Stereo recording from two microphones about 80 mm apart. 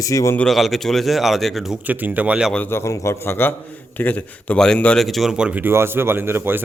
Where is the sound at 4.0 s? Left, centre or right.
Centre.